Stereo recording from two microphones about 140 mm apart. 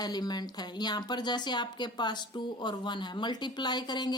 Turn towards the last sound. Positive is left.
turn(degrees=30)  # may be behind; listen again after turning